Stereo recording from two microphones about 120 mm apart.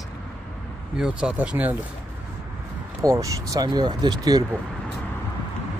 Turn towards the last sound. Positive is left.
turn(degrees=-35)  # may be behind; listen again after turning